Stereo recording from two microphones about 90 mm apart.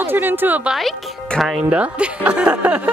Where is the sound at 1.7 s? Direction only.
15° right (ahead or behind).